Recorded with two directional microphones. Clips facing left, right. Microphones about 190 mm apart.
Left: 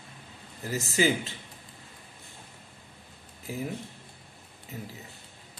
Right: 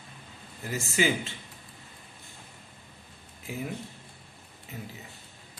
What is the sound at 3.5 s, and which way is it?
Speech, 40° left (ahead or behind).